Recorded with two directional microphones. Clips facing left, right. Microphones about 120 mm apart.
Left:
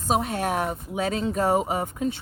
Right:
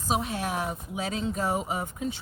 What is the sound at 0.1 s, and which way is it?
Speech, 55° left (ahead or behind).